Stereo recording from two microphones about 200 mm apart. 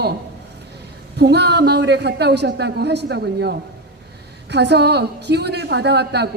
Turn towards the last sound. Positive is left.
turn(degrees=-55)  # may be behind; listen again after turning